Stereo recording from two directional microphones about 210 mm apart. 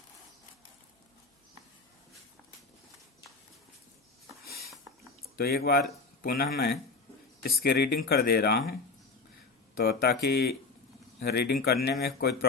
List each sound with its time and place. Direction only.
4.4 s a sound: 45° left (ahead or behind)
5.4 s speech: 45° left (ahead or behind)
9.7 s speech: 50° left (ahead or behind)